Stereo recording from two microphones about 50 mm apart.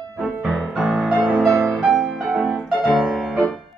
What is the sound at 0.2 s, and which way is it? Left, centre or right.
Music, centre.